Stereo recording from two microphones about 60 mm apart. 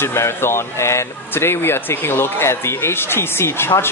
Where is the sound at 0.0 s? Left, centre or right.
Left.